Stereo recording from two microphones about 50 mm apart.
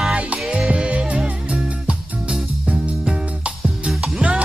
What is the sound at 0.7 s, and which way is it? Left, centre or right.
Music, right.